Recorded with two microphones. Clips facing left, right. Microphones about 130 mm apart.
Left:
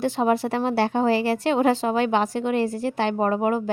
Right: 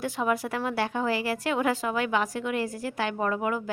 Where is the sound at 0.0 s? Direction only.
30° left (ahead or behind).